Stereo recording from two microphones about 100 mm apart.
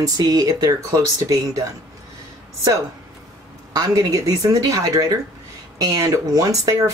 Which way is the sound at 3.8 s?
40° right (ahead or behind).